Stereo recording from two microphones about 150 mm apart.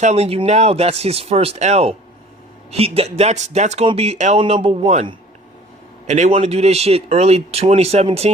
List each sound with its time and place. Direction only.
0.0 s a man's voice: 45° right (ahead or behind)
6.1 s speech: 50° right (ahead or behind)